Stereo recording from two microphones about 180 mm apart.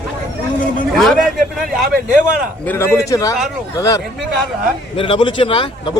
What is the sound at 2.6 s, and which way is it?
A man's voice, 15° left (ahead or behind).